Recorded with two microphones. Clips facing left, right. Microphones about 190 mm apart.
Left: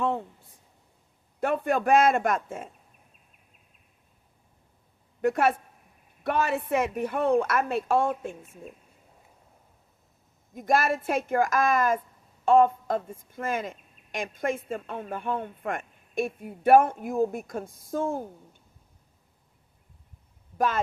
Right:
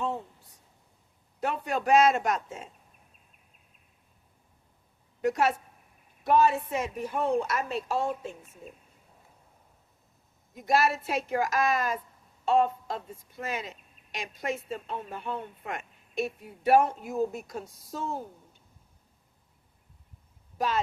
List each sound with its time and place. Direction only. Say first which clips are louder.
0.0 s a sound: left 4 dB; 55° left (ahead or behind)
1.4 s speech: left 5 dB; 55° left (ahead or behind)
5.2 s speech: left 2 dB; 55° left (ahead or behind)
6.2 s a woman's voice: right 3 dB; 65° left (ahead or behind)
10.5 s speech: left 1 dB; 50° left (ahead or behind)